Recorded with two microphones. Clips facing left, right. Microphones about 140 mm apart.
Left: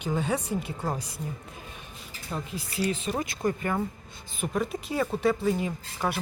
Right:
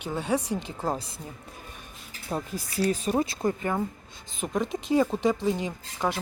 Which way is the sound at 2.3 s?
40° right (ahead or behind).